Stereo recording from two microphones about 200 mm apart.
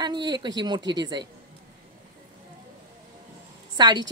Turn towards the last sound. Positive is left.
turn(degrees=-20)  # may be behind; listen again after turning